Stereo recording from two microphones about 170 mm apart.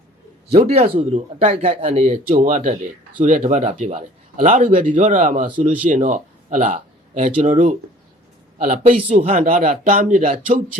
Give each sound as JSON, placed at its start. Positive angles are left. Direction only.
{"t": 0.7, "sound": "a man's voice", "side_deg": -40}
{"t": 9.4, "sound": "speech", "side_deg": -55}